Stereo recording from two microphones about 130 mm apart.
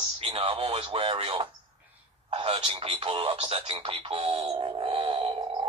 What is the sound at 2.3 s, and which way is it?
Speech, 45° right (ahead or behind).